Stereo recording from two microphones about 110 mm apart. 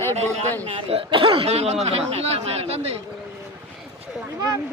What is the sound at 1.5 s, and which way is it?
Speech, 75° right (ahead or behind).